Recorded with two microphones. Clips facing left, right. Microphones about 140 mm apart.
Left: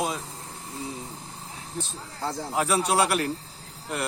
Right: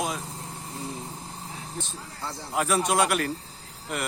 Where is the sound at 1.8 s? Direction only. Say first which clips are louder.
Left 6 dB; 40° left (ahead or behind).